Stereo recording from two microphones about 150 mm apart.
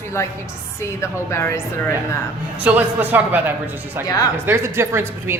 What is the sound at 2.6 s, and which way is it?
Speech, 10° right (ahead or behind).